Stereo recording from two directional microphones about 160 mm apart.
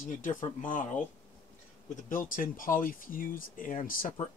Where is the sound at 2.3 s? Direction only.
60° left (ahead or behind).